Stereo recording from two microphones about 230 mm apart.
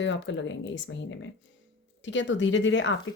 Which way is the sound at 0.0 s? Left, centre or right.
Left.